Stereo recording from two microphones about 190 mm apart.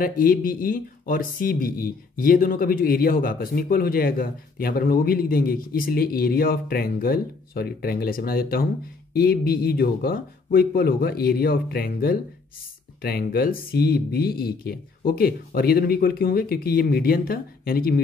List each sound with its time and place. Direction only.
0.0 s speech: 50° left (ahead or behind)